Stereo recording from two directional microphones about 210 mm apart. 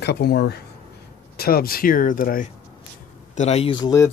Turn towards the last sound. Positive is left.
turn(degrees=20)  # may be behind; listen again after turning